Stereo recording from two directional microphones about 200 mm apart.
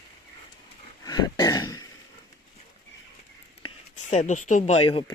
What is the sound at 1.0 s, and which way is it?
Throat clearing, 20° left (ahead or behind).